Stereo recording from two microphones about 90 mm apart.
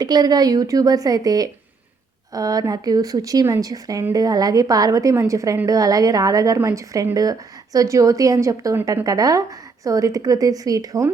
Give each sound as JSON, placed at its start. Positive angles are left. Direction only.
{"t": 0.0, "sound": "a woman's voice", "side_deg": -50}